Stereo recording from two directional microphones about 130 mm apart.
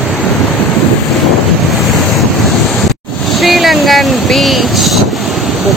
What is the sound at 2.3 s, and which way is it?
Waves, centre (ahead or behind).